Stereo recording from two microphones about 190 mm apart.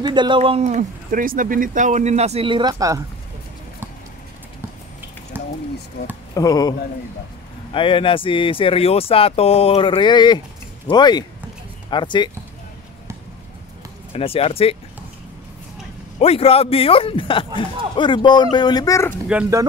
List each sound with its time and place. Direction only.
0.0 s speech: 25° right (ahead or behind)
5.4 s a sound: 10° right (ahead or behind)
6.0 s speech: 55° left (ahead or behind)
6.3 s speech: 20° left (ahead or behind)
7.7 s speech: 25° left (ahead or behind)
14.1 s speech: 30° left (ahead or behind)
16.2 s speech: 30° left (ahead or behind); by 19.1 s 15° left (ahead or behind)